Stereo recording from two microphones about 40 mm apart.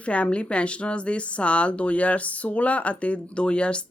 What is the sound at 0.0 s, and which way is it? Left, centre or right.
A woman's voice, left.